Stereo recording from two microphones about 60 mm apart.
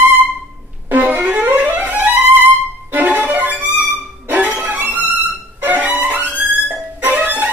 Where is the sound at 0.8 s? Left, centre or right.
Right.